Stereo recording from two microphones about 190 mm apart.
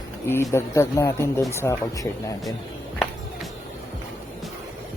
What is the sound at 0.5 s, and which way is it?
Speech, 15° left (ahead or behind).